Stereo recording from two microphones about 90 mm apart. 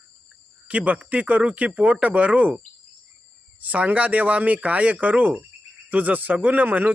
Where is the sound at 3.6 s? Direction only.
15° right (ahead or behind).